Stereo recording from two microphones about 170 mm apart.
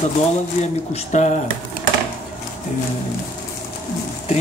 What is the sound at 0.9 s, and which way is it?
Speech, 45° left (ahead or behind).